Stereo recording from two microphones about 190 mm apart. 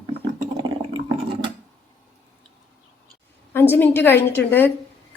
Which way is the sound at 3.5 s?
10° left (ahead or behind).